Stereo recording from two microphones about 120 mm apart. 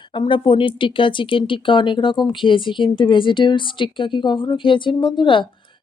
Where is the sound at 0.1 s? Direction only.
40° left (ahead or behind).